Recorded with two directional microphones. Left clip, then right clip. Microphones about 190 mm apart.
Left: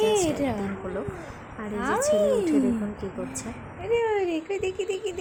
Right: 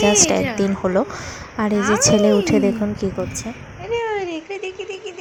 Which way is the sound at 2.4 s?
35° right (ahead or behind).